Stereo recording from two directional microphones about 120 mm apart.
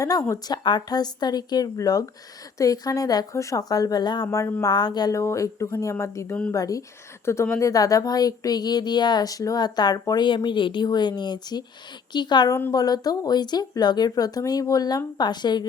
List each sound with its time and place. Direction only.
0.0 s speech: 30° left (ahead or behind)
4.3 s speech: 25° left (ahead or behind)
4.7 s speech: 35° left (ahead or behind)